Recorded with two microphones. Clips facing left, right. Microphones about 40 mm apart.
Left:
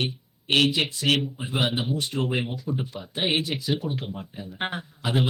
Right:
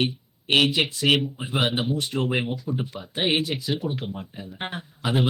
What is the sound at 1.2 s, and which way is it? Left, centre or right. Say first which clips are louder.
Speech: right 1 dB; centre.